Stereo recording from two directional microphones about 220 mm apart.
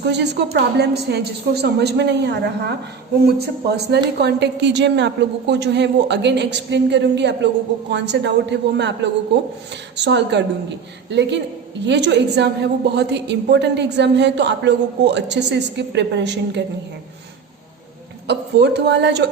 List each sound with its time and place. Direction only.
0.0 s a woman's voice: 50° right (ahead or behind)
18.3 s a woman's voice: 50° right (ahead or behind)